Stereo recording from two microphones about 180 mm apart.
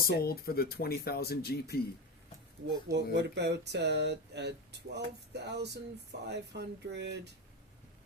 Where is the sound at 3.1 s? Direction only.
70° right (ahead or behind).